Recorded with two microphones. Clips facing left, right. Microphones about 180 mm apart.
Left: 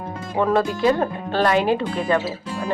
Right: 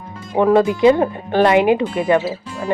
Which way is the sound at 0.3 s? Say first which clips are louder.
Right 6 dB; 15° right (ahead or behind).